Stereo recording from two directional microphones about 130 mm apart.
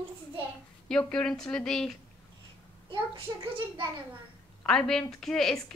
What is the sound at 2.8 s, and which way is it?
A child's voice, 45° right (ahead or behind).